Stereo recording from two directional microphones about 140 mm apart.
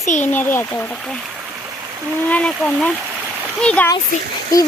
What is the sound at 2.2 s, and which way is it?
Speech, 10° left (ahead or behind).